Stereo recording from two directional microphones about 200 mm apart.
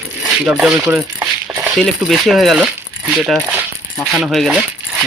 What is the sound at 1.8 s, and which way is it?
Speech, centre (ahead or behind).